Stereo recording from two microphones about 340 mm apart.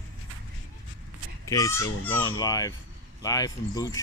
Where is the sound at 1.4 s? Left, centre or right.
Centre.